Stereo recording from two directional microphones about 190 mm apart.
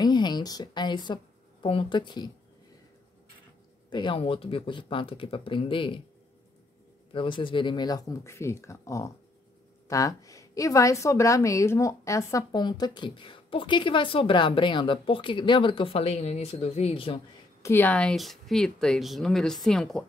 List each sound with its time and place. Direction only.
0.0 s speech: 20° left (ahead or behind)
3.9 s a woman's voice: 25° left (ahead or behind)
7.1 s a woman's voice: 25° left (ahead or behind)
17.6 s speech: 10° left (ahead or behind)